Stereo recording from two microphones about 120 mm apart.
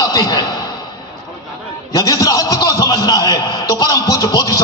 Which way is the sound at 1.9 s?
30° left (ahead or behind).